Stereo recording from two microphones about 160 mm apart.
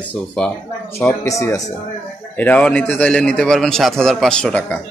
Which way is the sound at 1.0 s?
20° left (ahead or behind).